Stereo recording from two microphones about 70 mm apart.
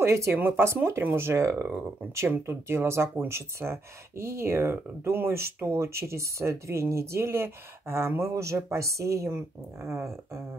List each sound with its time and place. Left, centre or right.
0.0 s speech: right
2.2 s speech: right